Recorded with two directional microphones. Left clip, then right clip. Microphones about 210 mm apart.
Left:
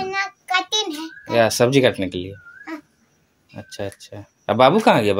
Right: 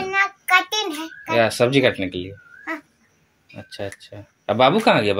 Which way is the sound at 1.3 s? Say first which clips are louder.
Left 1 dB; 20° left (ahead or behind).